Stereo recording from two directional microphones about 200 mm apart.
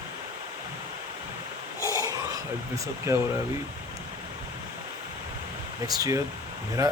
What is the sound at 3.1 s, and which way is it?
Speech, 15° right (ahead or behind).